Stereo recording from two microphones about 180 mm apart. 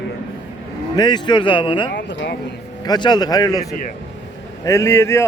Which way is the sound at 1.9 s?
75° left (ahead or behind).